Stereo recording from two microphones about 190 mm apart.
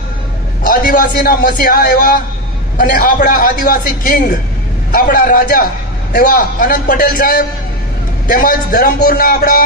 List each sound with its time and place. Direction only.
0.7 s a man's voice: 50° left (ahead or behind)